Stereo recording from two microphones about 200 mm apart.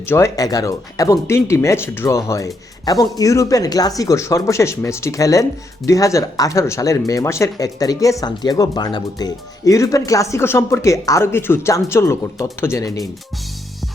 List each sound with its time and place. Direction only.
0.0 s speech: 10° left (ahead or behind)